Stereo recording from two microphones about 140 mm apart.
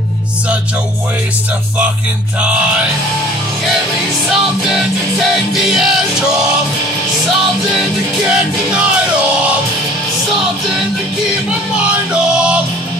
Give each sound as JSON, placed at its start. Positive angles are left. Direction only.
{"t": 4.3, "sound": "music", "side_deg": 0}
{"t": 8.3, "sound": "music", "side_deg": -10}
{"t": 11.7, "sound": "music", "side_deg": -5}